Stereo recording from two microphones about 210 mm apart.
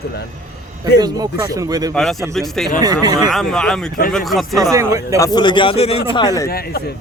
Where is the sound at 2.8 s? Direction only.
20° right (ahead or behind).